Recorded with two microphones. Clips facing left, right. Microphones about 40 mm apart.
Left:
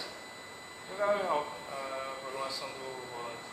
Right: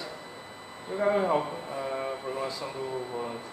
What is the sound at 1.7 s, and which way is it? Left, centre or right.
Vehicle, centre.